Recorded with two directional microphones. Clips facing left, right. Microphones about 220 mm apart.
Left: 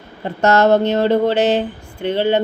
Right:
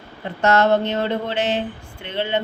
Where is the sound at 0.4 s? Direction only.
40° left (ahead or behind).